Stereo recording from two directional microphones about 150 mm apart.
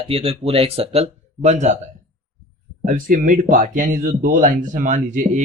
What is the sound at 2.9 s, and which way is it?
Speech, 65° right (ahead or behind).